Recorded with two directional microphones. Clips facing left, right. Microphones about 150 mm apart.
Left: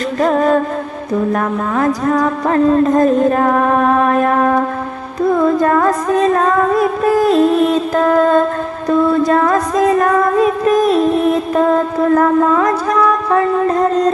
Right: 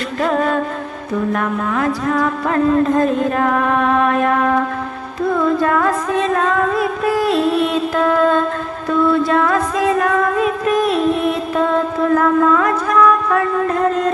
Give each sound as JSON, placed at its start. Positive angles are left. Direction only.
{"t": 0.2, "sound": "music", "side_deg": 40}